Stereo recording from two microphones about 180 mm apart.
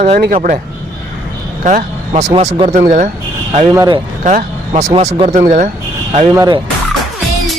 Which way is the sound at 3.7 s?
20° right (ahead or behind).